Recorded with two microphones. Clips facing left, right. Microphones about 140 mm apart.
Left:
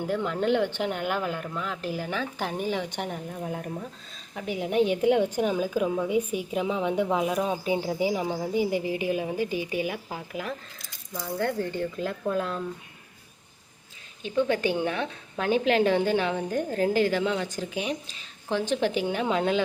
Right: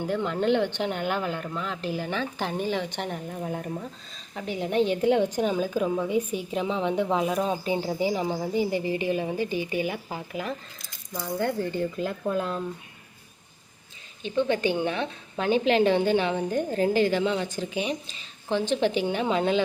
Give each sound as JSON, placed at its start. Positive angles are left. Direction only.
{"t": 0.0, "sound": "a woman's voice", "side_deg": 5}
{"t": 14.2, "sound": "a woman's voice", "side_deg": 5}